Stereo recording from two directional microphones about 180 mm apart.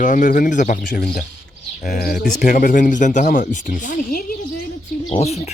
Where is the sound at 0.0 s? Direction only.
45° left (ahead or behind).